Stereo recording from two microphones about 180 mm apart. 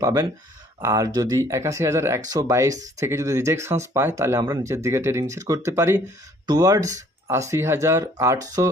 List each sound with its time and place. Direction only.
0.0 s speech: 15° right (ahead or behind)